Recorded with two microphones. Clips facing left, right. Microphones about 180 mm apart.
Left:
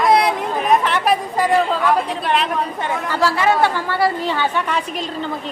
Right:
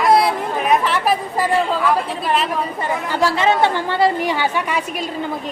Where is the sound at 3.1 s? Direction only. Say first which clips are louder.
Even; 15° right (ahead or behind).